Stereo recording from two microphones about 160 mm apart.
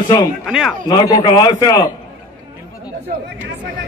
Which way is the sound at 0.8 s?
25° left (ahead or behind).